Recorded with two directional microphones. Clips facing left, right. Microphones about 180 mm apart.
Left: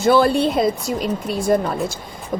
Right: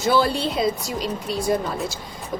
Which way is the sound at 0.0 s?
55° left (ahead or behind).